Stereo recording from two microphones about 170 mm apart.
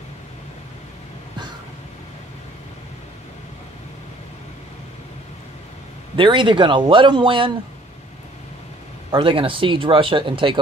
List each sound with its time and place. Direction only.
6.1 s speech: 30° right (ahead or behind)
9.1 s speech: 30° right (ahead or behind)